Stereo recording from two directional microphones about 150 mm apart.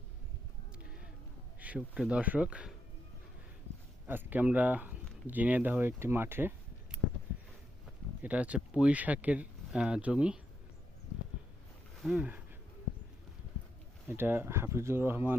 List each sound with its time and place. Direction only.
1.5 s speech: 10° right (ahead or behind)
4.0 s speech: 15° right (ahead or behind)
8.2 s speech: 10° right (ahead or behind)
12.0 s speech: 5° right (ahead or behind)
14.1 s speech: 15° right (ahead or behind)